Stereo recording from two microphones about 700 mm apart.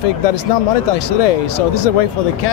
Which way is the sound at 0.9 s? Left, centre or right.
Left.